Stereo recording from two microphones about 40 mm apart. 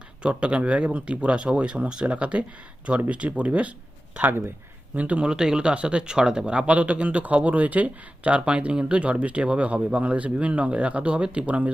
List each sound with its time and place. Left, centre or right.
0.2 s speech: right
4.2 s speech: right
4.9 s speech: right
5.2 s speech: centre; by 11.7 s right